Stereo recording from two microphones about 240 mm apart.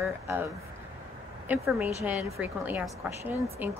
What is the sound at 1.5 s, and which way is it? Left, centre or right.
Speech, centre.